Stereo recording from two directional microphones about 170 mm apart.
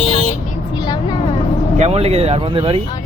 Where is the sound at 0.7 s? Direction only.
25° left (ahead or behind).